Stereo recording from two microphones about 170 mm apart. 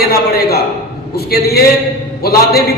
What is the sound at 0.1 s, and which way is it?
A man's voice, 65° left (ahead or behind).